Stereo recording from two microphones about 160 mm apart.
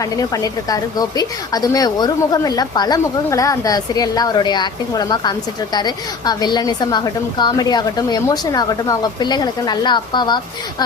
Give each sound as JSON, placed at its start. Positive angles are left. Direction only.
{"t": 0.0, "sound": "a woman's voice", "side_deg": 20}